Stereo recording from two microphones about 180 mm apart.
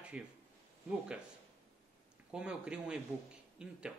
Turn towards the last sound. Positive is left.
turn(degrees=-5)  # may be behind; listen again after turning